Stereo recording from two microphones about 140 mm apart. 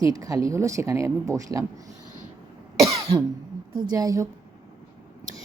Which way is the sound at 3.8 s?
30° right (ahead or behind).